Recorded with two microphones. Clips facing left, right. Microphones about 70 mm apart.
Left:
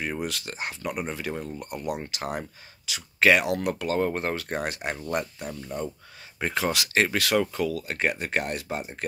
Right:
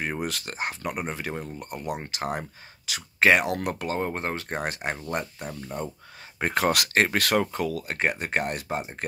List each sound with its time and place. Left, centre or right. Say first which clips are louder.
0.2 s speech: right 1 dB; right
1.0 s speech: even; right
3.9 s speech: left 4 dB; centre
6.4 s speech: right 3 dB; right